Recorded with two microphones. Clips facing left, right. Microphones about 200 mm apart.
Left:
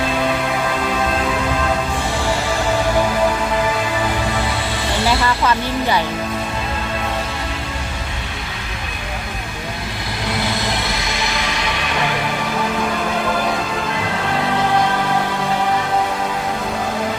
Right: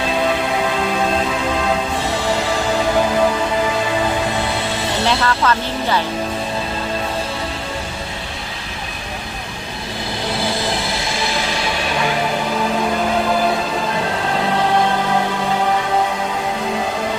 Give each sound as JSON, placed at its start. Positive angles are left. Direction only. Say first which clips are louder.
{"t": 5.0, "sound": "speech", "louder": "even", "side_deg": 10}
{"t": 10.9, "sound": "music", "louder": "right 2 dB", "side_deg": -30}